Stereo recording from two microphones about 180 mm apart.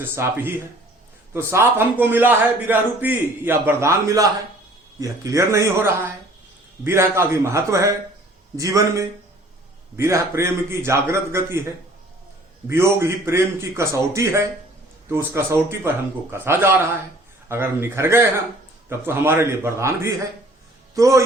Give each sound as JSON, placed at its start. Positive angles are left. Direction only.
{"t": 0.0, "sound": "a man's voice", "side_deg": -10}
{"t": 12.6, "sound": "a man's voice", "side_deg": -15}